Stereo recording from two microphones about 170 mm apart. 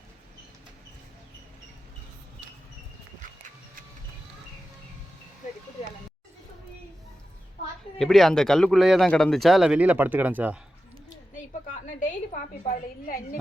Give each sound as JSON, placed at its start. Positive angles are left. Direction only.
{"t": 7.9, "sound": "speech", "side_deg": 0}
{"t": 11.7, "sound": "a woman's voice", "side_deg": 50}